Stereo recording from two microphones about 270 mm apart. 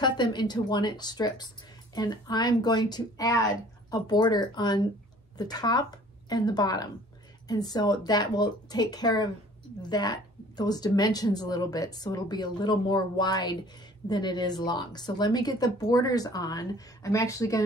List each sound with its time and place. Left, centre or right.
0.0 s a woman's voice: centre